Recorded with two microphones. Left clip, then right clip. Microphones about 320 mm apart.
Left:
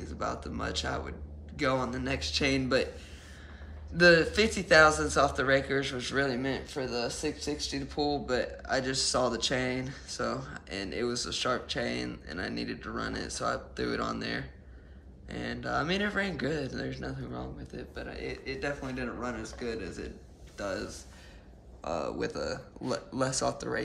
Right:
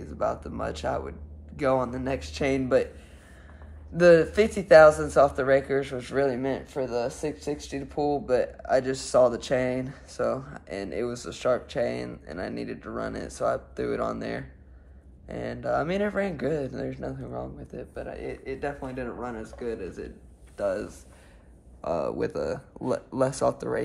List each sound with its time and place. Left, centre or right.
0.0 s speech: centre
3.9 s speech: centre